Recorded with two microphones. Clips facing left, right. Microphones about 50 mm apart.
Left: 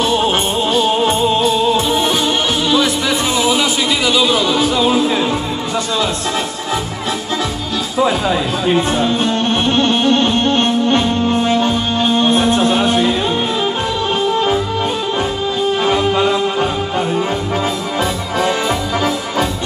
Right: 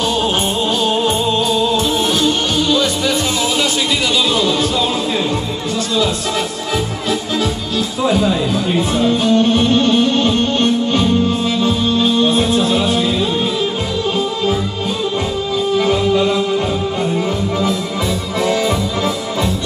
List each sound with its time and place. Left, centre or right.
0.0 s music: centre
1.0 s music: left
4.2 s music: centre
8.9 s music: left
15.8 s music: left
18.4 s music: left